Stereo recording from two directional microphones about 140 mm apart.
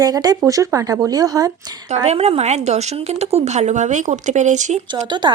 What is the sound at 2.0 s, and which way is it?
Speech, 45° right (ahead or behind).